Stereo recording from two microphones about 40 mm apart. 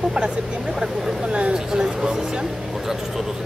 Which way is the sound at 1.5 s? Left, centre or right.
Centre.